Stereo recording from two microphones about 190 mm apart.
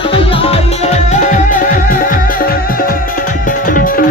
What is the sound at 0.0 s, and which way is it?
Music, 30° left (ahead or behind).